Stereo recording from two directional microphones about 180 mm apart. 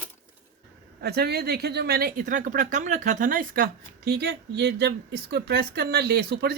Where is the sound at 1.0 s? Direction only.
65° right (ahead or behind).